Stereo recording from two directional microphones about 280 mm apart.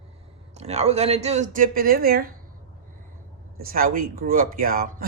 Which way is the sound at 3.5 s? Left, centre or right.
Right.